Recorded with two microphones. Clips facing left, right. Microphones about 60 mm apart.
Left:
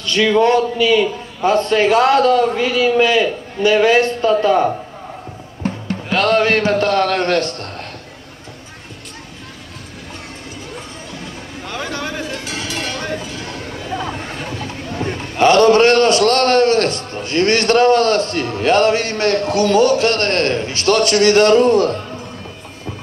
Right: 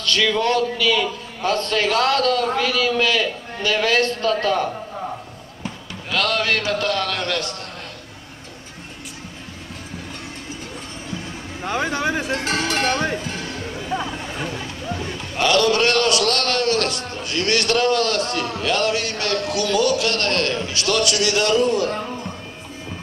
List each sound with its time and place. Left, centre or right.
0.0 s a man's voice: centre
6.0 s a man's voice: left
11.6 s speech: right
12.3 s speech: right
15.3 s a man's voice: left